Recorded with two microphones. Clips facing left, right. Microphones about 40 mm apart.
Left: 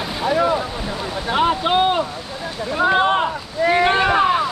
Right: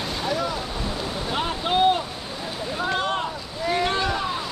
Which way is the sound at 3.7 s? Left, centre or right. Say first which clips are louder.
Left 7 dB; left.